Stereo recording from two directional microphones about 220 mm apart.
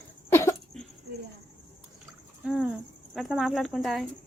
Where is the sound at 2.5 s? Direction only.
Centre (ahead or behind).